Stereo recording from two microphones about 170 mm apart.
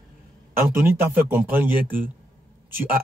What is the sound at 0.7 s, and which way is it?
Speech, 10° right (ahead or behind).